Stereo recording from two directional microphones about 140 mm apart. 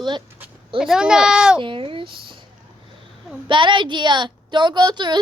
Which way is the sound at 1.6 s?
40° right (ahead or behind).